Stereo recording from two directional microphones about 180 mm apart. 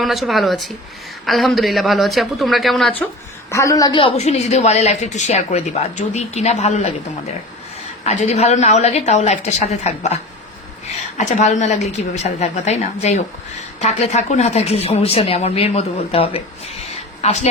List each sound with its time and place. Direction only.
0.0 s a woman's voice: centre (ahead or behind)
3.5 s a woman's voice: 15° left (ahead or behind); by 6.9 s 35° left (ahead or behind)
8.0 s a woman's voice: 40° left (ahead or behind)
11.2 s a woman's voice: 40° left (ahead or behind)